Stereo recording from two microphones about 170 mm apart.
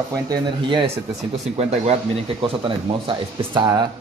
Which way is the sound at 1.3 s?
40° right (ahead or behind).